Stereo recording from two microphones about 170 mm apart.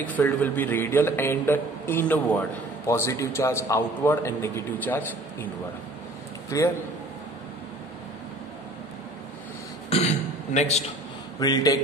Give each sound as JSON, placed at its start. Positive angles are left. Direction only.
{"t": 0.0, "sound": "a man's voice", "side_deg": 10}
{"t": 6.5, "sound": "speech", "side_deg": 20}
{"t": 9.8, "sound": "throat clearing", "side_deg": 40}
{"t": 11.3, "sound": "speech", "side_deg": 20}